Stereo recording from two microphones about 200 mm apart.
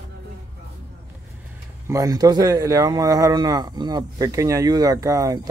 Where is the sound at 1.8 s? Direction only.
15° right (ahead or behind).